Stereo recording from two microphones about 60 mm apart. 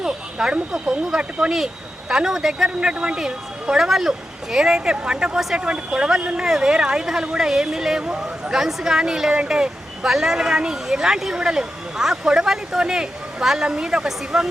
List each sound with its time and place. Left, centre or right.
0.0 s speech: centre
2.6 s speech: centre